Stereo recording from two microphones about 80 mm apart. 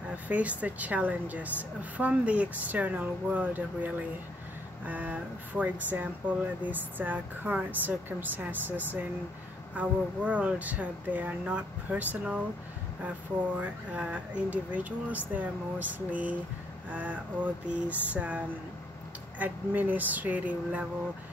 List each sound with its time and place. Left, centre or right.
0.1 s speech: centre
13.6 s speech: centre
16.9 s a sound: centre
19.3 s speech: right